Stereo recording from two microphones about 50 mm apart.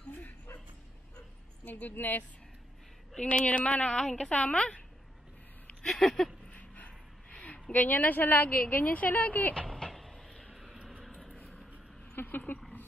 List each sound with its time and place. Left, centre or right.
0.1 s dog: left
3.2 s speech: left
3.9 s speech: centre
4.3 s speech: left
5.9 s speech: centre
6.5 s dog: left
7.7 s a woman's voice: left
9.7 s vehicle: centre
10.7 s a sound: centre
11.4 s vehicle: centre
12.2 s a sound: left